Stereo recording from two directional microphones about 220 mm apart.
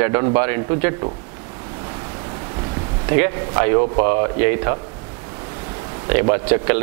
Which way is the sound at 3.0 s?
15° right (ahead or behind).